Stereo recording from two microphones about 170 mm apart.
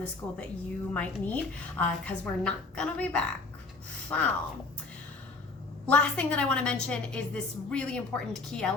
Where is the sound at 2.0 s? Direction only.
5° left (ahead or behind).